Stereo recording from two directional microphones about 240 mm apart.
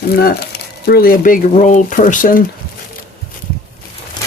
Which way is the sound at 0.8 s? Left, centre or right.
Left.